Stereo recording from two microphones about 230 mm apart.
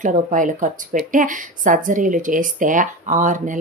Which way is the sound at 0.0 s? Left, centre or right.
Right.